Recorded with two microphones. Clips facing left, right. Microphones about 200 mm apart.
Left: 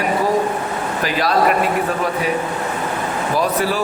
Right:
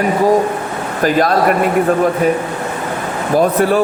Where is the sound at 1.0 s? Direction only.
50° right (ahead or behind).